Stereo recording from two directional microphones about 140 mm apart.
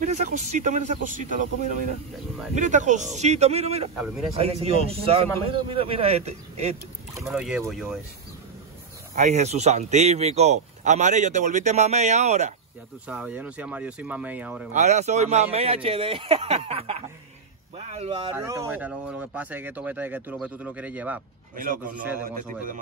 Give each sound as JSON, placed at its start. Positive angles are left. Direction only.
{"t": 0.0, "sound": "a man's voice", "side_deg": -60}
{"t": 3.9, "sound": "speech", "side_deg": -5}
{"t": 4.4, "sound": "speech", "side_deg": -50}
{"t": 7.2, "sound": "speech", "side_deg": -5}
{"t": 9.1, "sound": "speech", "side_deg": -55}
{"t": 13.0, "sound": "speech", "side_deg": -10}
{"t": 14.7, "sound": "speech", "side_deg": -55}
{"t": 18.3, "sound": "speech", "side_deg": -20}
{"t": 22.2, "sound": "a man's voice", "side_deg": -85}